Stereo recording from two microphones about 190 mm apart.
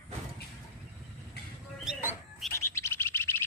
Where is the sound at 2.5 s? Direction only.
15° left (ahead or behind).